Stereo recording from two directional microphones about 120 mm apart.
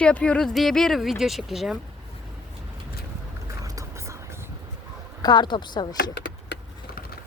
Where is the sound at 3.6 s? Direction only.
30° right (ahead or behind).